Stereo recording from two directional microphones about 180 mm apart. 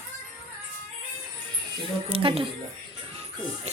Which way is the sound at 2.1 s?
30° right (ahead or behind).